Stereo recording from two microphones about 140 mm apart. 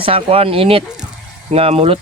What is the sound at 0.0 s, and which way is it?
Speech, 40° right (ahead or behind).